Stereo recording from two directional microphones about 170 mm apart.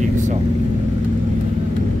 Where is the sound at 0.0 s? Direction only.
45° right (ahead or behind).